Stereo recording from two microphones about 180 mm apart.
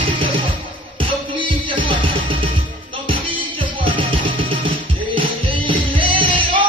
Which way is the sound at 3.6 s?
30° right (ahead or behind).